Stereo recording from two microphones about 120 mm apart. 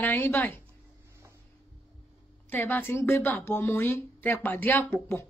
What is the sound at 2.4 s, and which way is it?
A woman's voice, 15° left (ahead or behind).